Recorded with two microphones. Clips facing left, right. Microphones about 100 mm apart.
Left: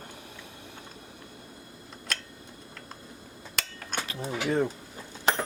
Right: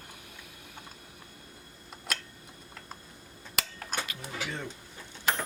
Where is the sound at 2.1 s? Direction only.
5° right (ahead or behind).